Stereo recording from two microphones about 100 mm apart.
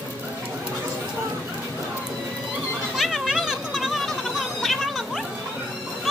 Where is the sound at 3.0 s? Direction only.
Centre (ahead or behind).